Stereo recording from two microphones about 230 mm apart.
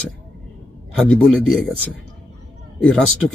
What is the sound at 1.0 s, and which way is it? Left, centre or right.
Speech, centre.